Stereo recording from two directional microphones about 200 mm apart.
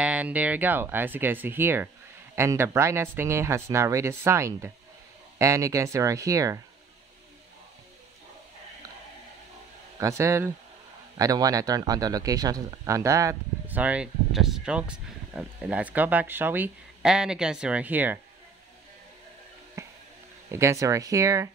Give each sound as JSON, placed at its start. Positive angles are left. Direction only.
{"t": 0.0, "sound": "a man's voice", "side_deg": -5}
{"t": 9.9, "sound": "a man's voice", "side_deg": -15}
{"t": 19.8, "sound": "a sound", "side_deg": -15}
{"t": 20.5, "sound": "a man's voice", "side_deg": -15}